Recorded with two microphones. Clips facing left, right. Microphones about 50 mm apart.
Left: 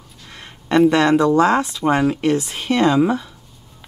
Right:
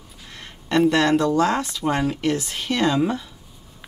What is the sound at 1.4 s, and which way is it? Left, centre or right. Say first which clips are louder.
Speech: left 5 dB; left.